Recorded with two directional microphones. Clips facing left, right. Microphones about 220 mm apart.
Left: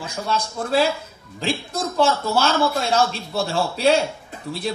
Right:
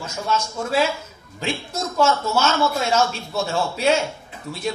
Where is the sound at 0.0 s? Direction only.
35° left (ahead or behind).